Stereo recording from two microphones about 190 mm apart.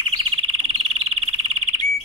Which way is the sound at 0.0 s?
30° right (ahead or behind).